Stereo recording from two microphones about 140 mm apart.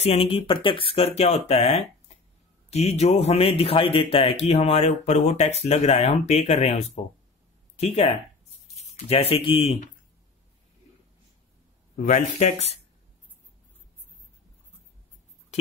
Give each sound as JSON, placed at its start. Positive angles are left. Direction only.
{"t": 0.0, "sound": "speech", "side_deg": 45}
{"t": 12.0, "sound": "speech", "side_deg": 55}